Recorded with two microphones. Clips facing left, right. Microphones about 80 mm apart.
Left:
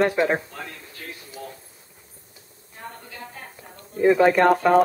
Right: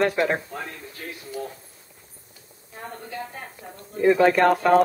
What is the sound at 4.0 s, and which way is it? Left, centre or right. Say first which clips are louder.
Speech: left 1 dB; centre.